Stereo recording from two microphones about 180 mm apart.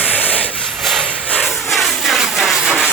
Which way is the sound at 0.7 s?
Centre (ahead or behind).